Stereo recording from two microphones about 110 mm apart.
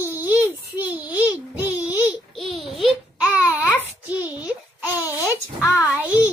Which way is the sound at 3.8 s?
15° right (ahead or behind).